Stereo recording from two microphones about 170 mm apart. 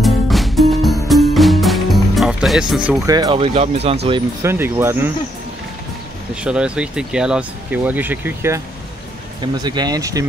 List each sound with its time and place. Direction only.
0.0 s music: centre (ahead or behind)
3.1 s speech: 25° right (ahead or behind)
4.4 s speech: 15° right (ahead or behind)
6.4 s speech: 5° right (ahead or behind)